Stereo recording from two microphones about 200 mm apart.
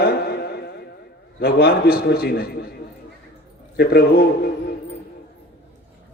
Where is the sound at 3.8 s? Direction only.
50° left (ahead or behind).